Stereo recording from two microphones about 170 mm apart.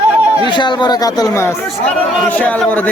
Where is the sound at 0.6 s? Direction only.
25° left (ahead or behind).